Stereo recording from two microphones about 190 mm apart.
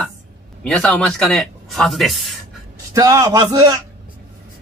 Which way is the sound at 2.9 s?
15° right (ahead or behind).